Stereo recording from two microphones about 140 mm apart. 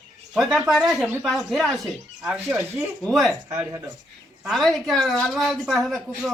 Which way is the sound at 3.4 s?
20° right (ahead or behind).